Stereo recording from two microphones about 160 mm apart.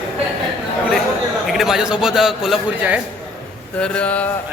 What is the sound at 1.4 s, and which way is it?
A man's voice, centre (ahead or behind).